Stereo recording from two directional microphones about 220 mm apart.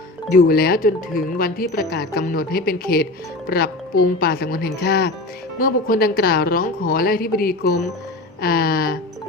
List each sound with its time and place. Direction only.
0.3 s speech: 40° left (ahead or behind)